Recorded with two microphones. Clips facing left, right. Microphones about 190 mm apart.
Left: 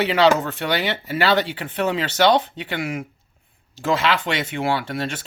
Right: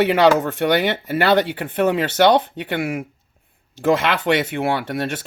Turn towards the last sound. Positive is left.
turn(degrees=-55)  # may be behind; listen again after turning